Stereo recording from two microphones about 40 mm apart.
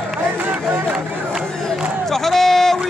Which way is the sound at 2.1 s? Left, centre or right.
Centre.